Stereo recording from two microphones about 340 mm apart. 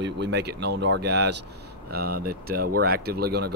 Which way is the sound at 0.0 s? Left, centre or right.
Right.